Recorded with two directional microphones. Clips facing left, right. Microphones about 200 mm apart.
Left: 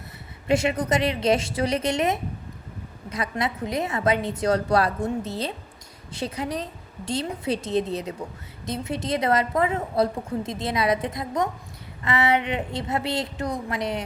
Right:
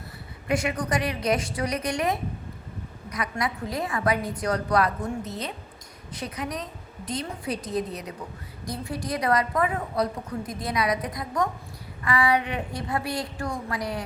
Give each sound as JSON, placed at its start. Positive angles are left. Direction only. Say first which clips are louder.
{"t": 0.4, "sound": "a woman's voice", "louder": "left 4 dB", "side_deg": 25}